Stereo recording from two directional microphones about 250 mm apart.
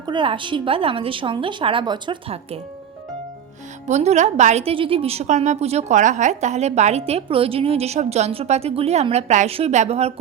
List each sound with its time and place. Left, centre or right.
0.0 s a woman's voice: centre
3.8 s a woman's voice: right